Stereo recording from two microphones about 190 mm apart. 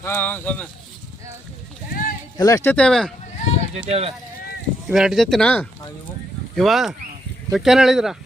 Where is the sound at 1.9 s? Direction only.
50° left (ahead or behind).